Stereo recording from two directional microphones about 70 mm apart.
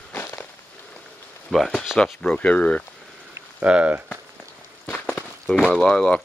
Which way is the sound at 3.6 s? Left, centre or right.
Right.